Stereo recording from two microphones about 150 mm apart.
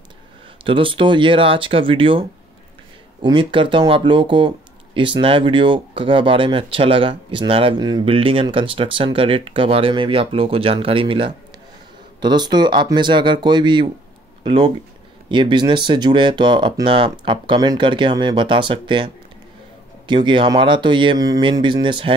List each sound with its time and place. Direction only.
0.7 s speech: 35° right (ahead or behind)